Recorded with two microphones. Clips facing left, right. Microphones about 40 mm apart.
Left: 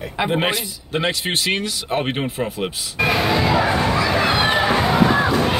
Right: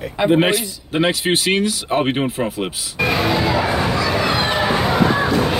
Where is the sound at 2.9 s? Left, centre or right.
Centre.